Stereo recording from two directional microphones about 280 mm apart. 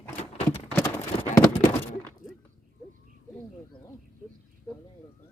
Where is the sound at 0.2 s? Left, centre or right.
Left.